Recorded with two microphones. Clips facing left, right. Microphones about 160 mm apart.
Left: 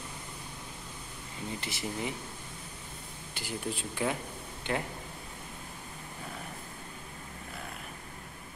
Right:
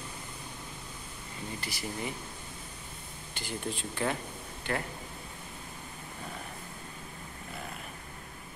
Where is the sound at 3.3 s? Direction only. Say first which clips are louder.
Even; 10° left (ahead or behind).